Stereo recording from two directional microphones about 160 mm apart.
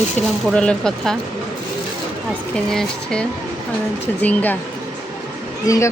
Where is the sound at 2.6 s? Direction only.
5° left (ahead or behind).